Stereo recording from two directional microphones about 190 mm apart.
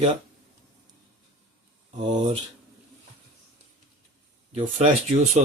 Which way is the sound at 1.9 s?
35° right (ahead or behind).